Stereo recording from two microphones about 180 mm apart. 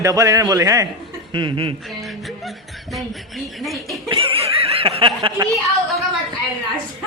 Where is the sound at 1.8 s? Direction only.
Centre (ahead or behind).